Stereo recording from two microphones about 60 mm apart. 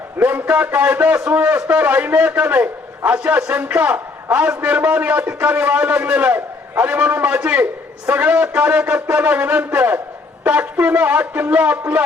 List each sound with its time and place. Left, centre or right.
0.2 s a man's voice: right